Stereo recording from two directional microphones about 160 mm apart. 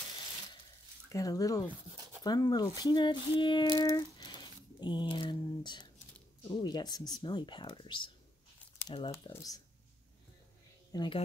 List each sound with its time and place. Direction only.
1.0 s speech: 20° left (ahead or behind)
9.3 s speech: 20° left (ahead or behind)
10.9 s speech: 25° left (ahead or behind)